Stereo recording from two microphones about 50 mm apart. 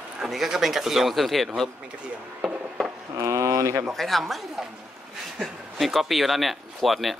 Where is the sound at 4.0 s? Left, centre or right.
Centre.